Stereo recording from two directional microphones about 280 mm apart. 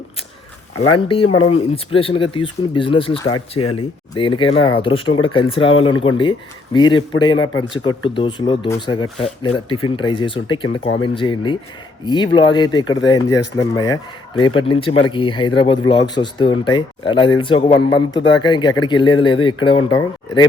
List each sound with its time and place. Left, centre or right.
0.9 s speech: centre